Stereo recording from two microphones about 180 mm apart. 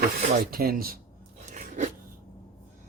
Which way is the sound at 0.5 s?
55° right (ahead or behind).